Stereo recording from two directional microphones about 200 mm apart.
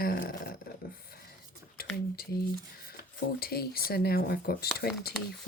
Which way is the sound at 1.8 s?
50° left (ahead or behind).